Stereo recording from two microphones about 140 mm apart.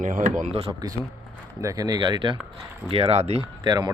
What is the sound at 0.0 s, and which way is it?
Speech, 60° right (ahead or behind).